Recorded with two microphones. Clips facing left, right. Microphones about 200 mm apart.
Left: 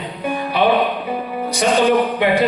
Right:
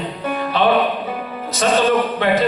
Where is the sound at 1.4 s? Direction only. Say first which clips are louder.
Left 1 dB; 15° left (ahead or behind).